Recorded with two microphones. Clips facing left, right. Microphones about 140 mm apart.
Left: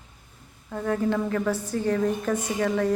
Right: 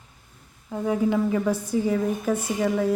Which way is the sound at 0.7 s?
10° right (ahead or behind).